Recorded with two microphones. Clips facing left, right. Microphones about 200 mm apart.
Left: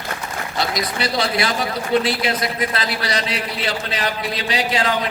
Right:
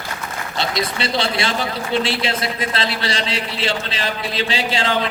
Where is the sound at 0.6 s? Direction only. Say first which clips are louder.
Even; 25° right (ahead or behind).